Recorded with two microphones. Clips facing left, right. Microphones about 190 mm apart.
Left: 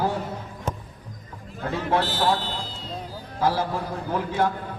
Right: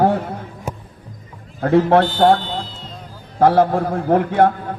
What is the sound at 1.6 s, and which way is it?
A man's voice, 60° right (ahead or behind).